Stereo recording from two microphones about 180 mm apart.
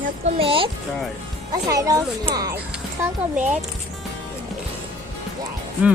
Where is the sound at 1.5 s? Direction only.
20° right (ahead or behind).